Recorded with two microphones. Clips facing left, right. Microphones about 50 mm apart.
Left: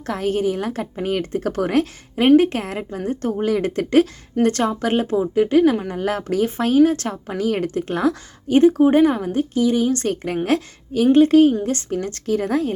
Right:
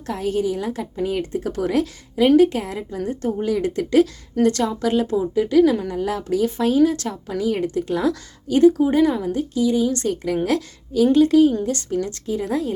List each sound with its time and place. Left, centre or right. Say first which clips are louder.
0.0 s speech: left 2 dB; left
5.9 s speech: even; left
11.9 s speech: right 1 dB; left
12.2 s speech: left 3 dB; left